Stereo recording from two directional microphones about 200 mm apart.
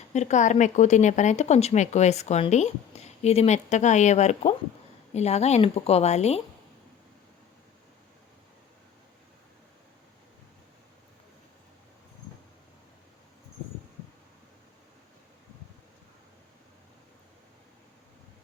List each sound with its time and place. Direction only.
0.1 s speech: 35° left (ahead or behind)